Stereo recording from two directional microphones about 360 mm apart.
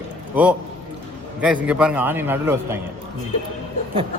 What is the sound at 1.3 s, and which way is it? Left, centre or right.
A man's voice, centre.